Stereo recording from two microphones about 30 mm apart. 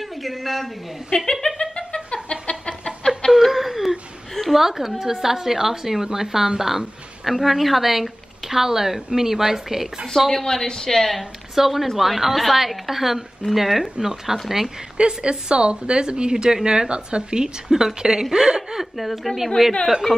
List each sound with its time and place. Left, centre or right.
0.2 s a woman's voice: centre
1.1 s a sound: left
2.2 s chicken: left
3.4 s whimper: centre
4.4 s a sound: centre
4.6 s a woman's voice: centre
7.2 s a woman's voice: centre
10.3 s speech: centre
11.5 s a woman's voice: centre
15.0 s speech: right
17.6 s a woman's voice: centre
18.8 s a woman's voice: centre
20.1 s speech: centre